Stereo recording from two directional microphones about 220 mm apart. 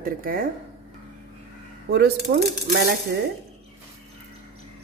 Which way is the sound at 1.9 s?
50° right (ahead or behind).